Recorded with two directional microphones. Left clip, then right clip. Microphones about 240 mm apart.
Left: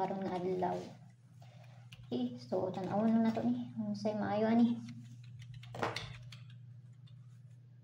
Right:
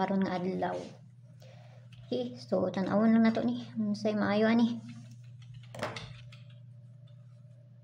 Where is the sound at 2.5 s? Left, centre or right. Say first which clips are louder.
Right 6 dB; right.